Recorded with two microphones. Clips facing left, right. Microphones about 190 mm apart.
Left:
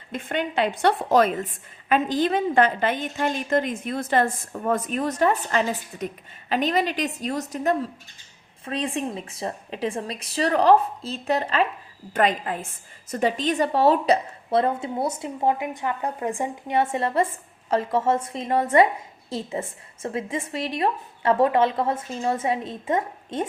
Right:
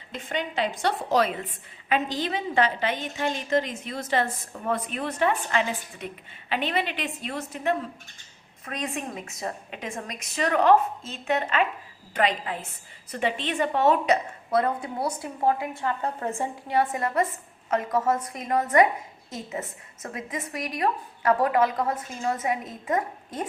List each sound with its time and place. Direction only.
0.1 s a woman's voice: 55° left (ahead or behind)
8.6 s a woman's voice: 30° left (ahead or behind)
12.1 s a woman's voice: 45° left (ahead or behind); by 23.5 s 25° left (ahead or behind)